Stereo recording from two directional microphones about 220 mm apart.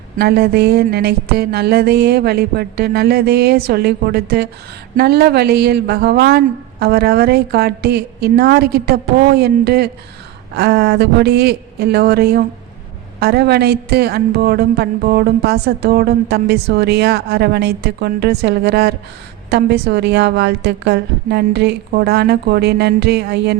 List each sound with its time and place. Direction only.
0.2 s a woman's voice: 45° right (ahead or behind)